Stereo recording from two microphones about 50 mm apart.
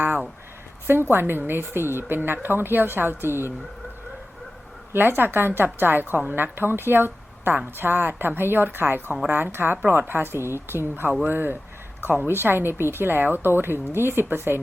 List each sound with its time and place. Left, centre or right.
0.9 s a woman's voice: right
4.9 s a woman's voice: right
12.3 s a woman's voice: right